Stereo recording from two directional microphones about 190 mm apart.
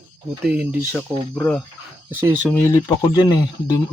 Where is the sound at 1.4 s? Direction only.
5° left (ahead or behind).